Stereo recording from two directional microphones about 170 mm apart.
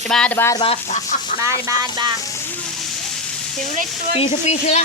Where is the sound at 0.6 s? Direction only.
40° left (ahead or behind).